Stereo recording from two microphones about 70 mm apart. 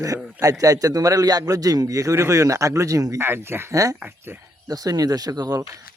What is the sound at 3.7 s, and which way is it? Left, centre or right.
Speech, right.